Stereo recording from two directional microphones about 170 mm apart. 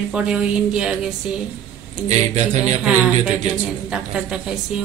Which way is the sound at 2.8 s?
10° right (ahead or behind).